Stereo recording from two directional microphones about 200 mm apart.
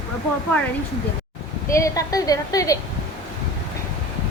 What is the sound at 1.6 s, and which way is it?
A woman's voice, 15° left (ahead or behind).